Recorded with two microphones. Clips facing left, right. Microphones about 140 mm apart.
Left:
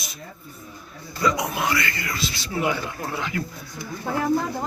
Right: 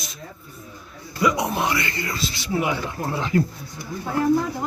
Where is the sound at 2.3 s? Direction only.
20° right (ahead or behind).